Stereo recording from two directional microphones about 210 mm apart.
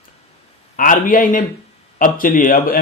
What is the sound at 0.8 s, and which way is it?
Speech, 40° left (ahead or behind).